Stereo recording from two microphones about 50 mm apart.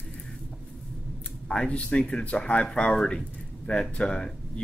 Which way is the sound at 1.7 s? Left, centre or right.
Left.